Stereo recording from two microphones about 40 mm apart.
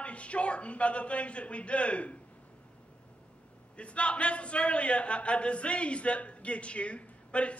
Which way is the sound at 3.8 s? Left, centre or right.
Left.